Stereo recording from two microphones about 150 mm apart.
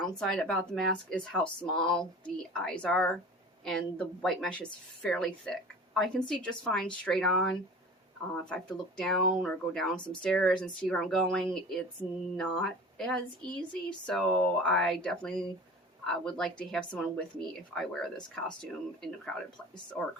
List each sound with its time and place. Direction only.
0.0 s speech: 5° left (ahead or behind)